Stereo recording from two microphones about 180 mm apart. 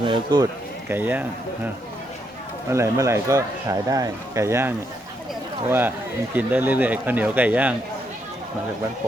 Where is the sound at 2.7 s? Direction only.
15° right (ahead or behind).